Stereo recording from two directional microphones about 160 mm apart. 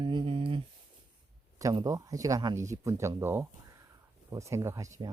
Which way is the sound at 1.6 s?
20° right (ahead or behind).